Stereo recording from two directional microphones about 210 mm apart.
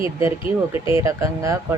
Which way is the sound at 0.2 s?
10° right (ahead or behind).